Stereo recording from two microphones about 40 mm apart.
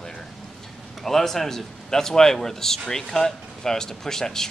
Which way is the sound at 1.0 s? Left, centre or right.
Centre.